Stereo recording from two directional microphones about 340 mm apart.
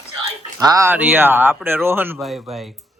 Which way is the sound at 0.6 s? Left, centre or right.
Centre.